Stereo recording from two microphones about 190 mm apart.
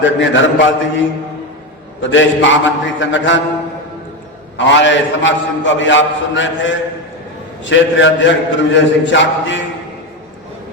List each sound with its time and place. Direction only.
0.0 s a man's voice: 80° left
4.5 s a man's voice: 70° left (ahead or behind)